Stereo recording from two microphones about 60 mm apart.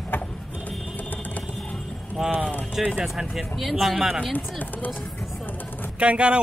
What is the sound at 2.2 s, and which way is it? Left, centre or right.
Speech, centre.